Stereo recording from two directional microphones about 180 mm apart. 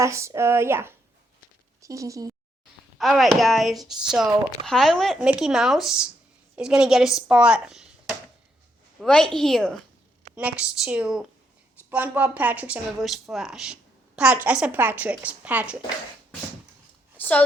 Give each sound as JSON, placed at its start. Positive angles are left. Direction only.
{"t": 0.0, "sound": "speech", "side_deg": -15}
{"t": 3.0, "sound": "speech", "side_deg": 0}
{"t": 17.2, "sound": "a sound", "side_deg": 10}